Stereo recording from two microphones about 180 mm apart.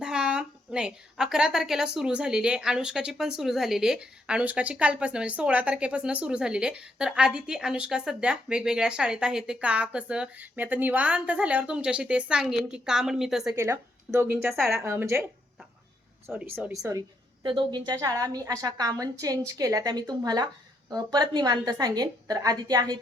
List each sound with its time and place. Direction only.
0.0 s a woman's voice: 5° right (ahead or behind)
13.6 s speech: 15° right (ahead or behind)
14.8 s a woman's voice: 15° right (ahead or behind)